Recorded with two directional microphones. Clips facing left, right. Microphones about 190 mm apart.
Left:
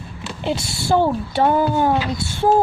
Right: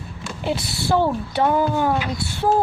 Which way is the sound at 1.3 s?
30° left (ahead or behind).